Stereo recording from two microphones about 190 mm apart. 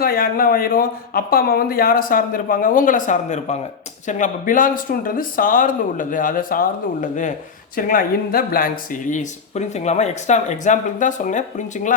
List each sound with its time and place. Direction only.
0.0 s speech: 50° left (ahead or behind)